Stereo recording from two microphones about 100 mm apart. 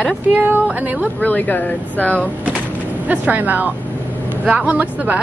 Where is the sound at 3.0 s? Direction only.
15° right (ahead or behind).